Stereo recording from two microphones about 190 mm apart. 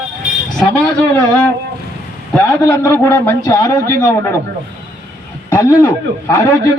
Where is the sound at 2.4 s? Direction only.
15° left (ahead or behind).